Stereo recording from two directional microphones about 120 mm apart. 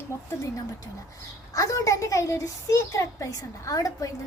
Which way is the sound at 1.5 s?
25° left (ahead or behind).